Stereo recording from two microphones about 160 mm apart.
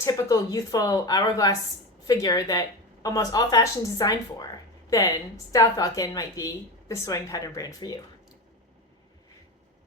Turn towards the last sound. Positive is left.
turn(degrees=25)  # may be behind; listen again after turning